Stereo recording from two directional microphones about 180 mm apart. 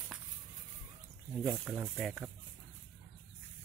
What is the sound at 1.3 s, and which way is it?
Speech, centre (ahead or behind).